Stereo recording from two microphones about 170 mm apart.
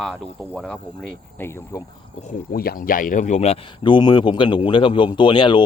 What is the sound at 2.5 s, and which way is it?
Speech, 60° left (ahead or behind).